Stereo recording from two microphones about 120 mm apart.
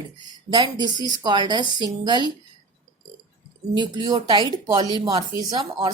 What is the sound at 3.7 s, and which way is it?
Speech, 35° right (ahead or behind).